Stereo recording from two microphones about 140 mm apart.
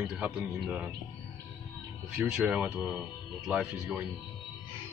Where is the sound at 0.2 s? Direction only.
10° right (ahead or behind).